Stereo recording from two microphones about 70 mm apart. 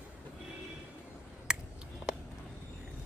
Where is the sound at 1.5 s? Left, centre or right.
Centre.